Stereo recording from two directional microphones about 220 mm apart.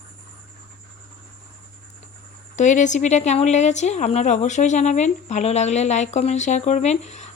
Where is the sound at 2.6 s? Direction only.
35° left (ahead or behind).